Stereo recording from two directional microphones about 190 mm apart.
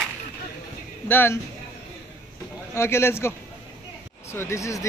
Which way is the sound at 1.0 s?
10° left (ahead or behind).